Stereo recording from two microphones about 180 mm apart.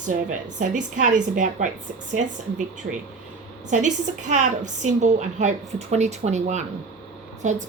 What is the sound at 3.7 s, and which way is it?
A woman's voice, 40° right (ahead or behind).